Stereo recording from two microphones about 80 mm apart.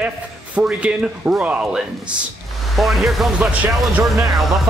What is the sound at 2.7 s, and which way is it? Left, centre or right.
Speech, centre.